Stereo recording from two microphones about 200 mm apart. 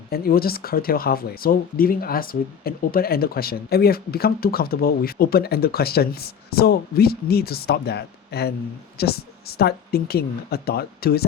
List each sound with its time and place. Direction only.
0.1 s speech: 50° left (ahead or behind)